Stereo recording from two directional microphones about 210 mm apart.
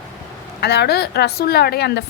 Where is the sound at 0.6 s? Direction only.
50° left (ahead or behind).